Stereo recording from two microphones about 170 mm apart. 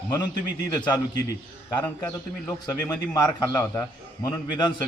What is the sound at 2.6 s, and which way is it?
A man's voice, 20° left (ahead or behind).